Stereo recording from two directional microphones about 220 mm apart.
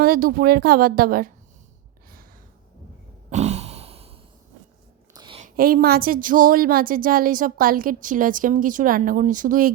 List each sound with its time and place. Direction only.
0.0 s a woman's voice: 40° right (ahead or behind)
3.2 s sigh: 30° right (ahead or behind)
5.1 s a sound: 20° right (ahead or behind)
5.4 s a woman's voice: 40° right (ahead or behind)